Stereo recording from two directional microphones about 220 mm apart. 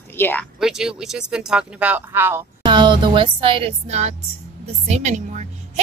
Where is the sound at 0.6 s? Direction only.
5° right (ahead or behind).